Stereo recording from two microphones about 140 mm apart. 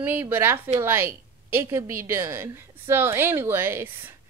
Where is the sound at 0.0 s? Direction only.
15° right (ahead or behind).